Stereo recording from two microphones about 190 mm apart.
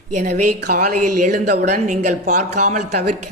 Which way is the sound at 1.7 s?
40° right (ahead or behind).